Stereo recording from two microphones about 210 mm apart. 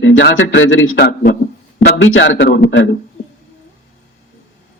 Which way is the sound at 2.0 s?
65° left (ahead or behind).